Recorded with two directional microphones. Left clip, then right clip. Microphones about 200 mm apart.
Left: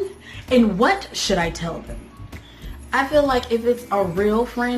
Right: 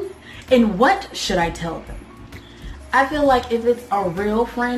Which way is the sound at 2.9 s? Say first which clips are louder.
Right 2 dB; 20° left (ahead or behind).